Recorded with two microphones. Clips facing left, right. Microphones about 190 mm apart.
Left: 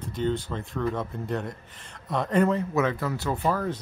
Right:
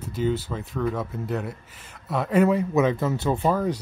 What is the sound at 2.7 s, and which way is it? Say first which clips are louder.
Speech: right 4 dB; 20° right (ahead or behind).